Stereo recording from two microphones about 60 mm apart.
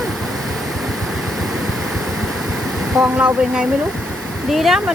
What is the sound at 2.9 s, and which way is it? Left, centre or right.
Speech, right.